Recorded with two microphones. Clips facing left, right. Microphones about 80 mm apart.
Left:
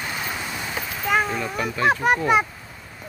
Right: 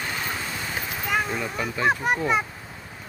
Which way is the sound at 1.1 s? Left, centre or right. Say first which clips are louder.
Left 4 dB; left.